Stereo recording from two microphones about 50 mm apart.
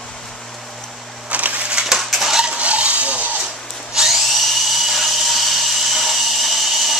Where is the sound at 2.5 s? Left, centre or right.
Right.